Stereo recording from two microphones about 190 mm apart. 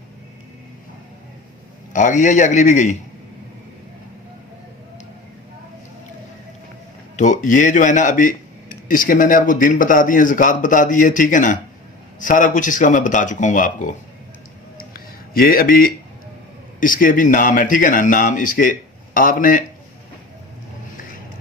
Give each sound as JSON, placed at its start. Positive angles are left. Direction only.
{"t": 1.9, "sound": "a man's voice", "side_deg": 40}
{"t": 7.2, "sound": "speech", "side_deg": 40}
{"t": 15.3, "sound": "speech", "side_deg": 50}